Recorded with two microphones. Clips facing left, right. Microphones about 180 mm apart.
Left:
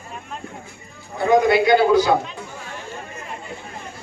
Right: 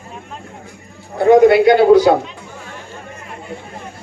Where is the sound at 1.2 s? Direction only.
65° right (ahead or behind).